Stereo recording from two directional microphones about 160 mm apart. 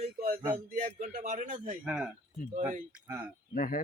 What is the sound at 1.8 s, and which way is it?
Speech, 5° right (ahead or behind).